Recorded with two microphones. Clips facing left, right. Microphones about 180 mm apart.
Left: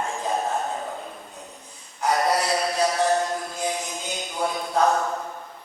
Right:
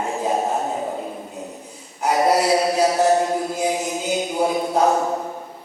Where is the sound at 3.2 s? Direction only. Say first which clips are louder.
Right 6 dB; 15° right (ahead or behind).